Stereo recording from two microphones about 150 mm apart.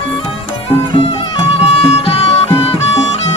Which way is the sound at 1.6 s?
40° left (ahead or behind).